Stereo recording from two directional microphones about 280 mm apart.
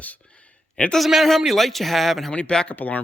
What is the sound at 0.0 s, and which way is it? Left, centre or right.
Speech, centre.